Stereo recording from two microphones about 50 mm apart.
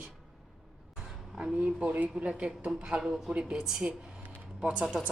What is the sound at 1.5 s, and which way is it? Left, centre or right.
Speech, right.